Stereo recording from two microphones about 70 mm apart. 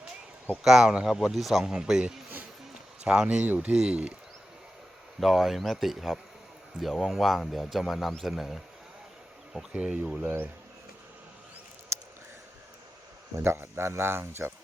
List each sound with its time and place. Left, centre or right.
0.5 s a man's voice: centre
5.2 s a man's voice: centre
9.7 s speech: centre
11.9 s a sound: right
13.4 s speech: right